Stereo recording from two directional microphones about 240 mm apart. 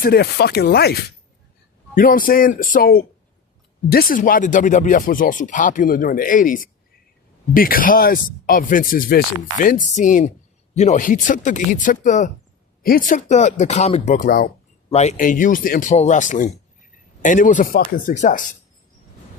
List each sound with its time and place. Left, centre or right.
0.0 s speech: left
2.0 s speech: left